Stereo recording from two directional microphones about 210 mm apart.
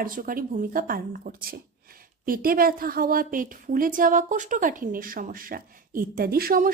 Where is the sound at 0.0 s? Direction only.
40° right (ahead or behind).